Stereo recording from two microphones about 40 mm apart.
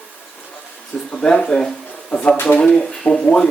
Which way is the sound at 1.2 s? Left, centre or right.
Left.